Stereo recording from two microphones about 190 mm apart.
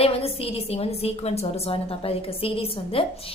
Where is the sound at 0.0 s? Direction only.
30° left (ahead or behind).